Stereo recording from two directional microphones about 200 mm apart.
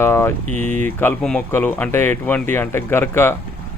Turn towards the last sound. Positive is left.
turn(degrees=10)  # may be behind; listen again after turning